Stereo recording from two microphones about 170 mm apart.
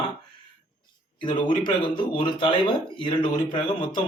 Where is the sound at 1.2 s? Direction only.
30° left (ahead or behind).